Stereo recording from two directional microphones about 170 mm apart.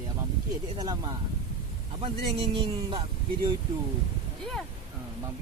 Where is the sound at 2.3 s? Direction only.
30° right (ahead or behind).